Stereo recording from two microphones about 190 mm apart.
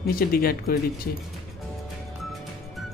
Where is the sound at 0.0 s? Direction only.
50° left (ahead or behind).